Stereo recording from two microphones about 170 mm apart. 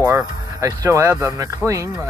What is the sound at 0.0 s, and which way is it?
Speech, 15° right (ahead or behind).